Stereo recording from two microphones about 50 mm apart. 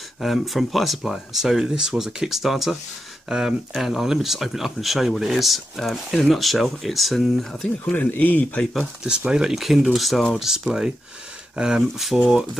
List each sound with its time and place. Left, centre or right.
0.2 s speech: centre
8.1 s speech: left
9.0 s speech: centre
10.4 s speech: centre